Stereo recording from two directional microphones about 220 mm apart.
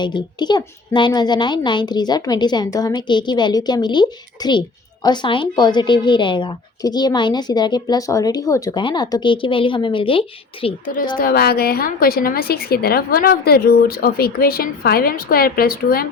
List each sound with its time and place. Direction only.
0.0 s a woman's voice: 20° left (ahead or behind)
11.2 s a woman's voice: 45° left (ahead or behind)